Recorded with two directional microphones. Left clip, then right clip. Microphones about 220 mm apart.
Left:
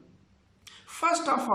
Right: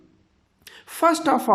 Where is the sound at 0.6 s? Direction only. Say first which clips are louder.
Right 7 dB; 35° right (ahead or behind).